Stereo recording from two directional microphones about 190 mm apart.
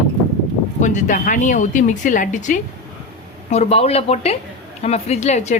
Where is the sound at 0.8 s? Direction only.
40° left (ahead or behind).